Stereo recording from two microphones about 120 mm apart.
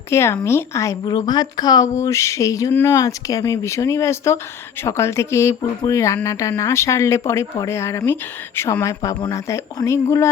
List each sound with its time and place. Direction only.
0.1 s speech: 20° left (ahead or behind)
2.0 s speech: 25° left (ahead or behind)